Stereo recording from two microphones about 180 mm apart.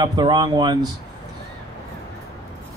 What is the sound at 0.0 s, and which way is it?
Speech, 25° right (ahead or behind).